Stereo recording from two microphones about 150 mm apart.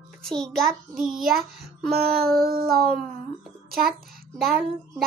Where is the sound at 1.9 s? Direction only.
90° right.